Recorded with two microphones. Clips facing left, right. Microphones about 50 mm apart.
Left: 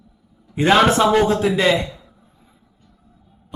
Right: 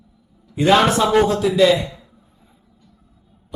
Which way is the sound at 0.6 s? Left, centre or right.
Left.